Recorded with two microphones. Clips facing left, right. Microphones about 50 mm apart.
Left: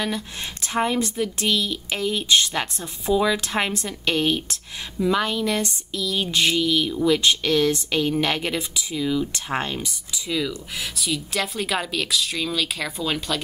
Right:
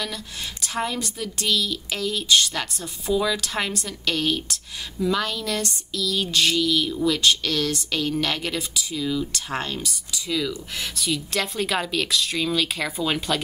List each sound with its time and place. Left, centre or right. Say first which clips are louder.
0.0 s speech: left 4 dB; left
10.8 s a woman's voice: even; centre